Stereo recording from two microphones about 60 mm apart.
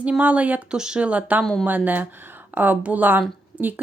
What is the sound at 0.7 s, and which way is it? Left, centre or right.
A woman's voice, centre.